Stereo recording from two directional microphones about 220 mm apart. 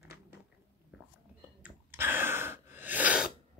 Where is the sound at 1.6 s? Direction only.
10° right (ahead or behind).